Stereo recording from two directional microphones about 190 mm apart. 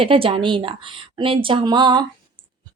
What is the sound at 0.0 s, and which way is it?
Speech, 30° right (ahead or behind).